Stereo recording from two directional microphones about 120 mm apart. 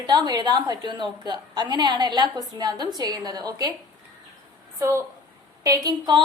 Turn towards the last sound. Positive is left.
turn(degrees=-35)  # may be behind; listen again after turning